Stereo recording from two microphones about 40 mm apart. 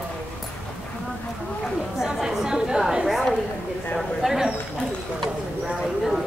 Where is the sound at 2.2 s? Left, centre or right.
Centre.